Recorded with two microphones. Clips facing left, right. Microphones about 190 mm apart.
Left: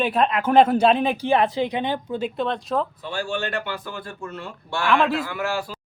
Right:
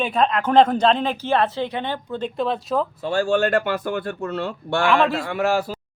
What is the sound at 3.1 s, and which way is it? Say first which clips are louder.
Speech: right 8 dB; 50° right (ahead or behind).